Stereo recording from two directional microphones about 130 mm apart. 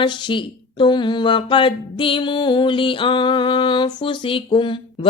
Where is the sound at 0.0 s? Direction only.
40° left (ahead or behind).